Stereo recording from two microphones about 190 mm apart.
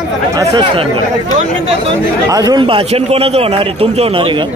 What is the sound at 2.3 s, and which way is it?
A man's voice, 20° right (ahead or behind).